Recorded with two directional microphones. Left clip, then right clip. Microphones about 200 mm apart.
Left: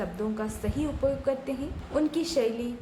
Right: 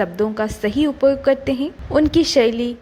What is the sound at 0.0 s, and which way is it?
A woman's voice, 35° right (ahead or behind).